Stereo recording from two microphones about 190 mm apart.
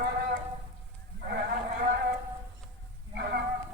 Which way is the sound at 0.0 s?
55° right (ahead or behind).